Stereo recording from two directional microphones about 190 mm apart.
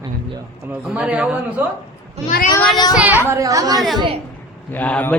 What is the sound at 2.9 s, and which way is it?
Speech, 5° right (ahead or behind).